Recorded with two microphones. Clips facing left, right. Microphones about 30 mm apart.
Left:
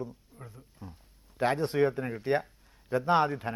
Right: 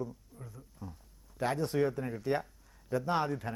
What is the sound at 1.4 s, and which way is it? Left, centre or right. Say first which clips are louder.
A man's voice: left 4 dB; left.